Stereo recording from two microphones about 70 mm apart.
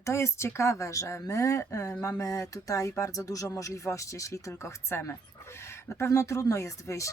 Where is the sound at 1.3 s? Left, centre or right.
Left.